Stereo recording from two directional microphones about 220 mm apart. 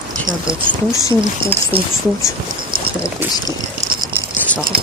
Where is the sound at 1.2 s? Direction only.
25° right (ahead or behind).